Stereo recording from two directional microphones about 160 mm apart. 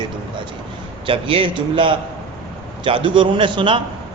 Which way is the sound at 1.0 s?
35° right (ahead or behind).